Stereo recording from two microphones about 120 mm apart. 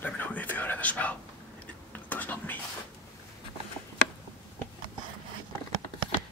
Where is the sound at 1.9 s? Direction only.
15° left (ahead or behind).